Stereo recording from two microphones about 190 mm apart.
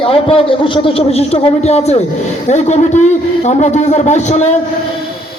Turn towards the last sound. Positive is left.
turn(degrees=35)  # may be behind; listen again after turning